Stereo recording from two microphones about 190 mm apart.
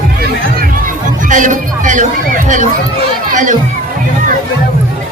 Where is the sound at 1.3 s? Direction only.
40° right (ahead or behind).